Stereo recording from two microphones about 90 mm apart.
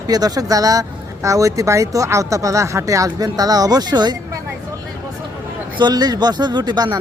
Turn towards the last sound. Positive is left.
turn(degrees=-50)  # may be behind; listen again after turning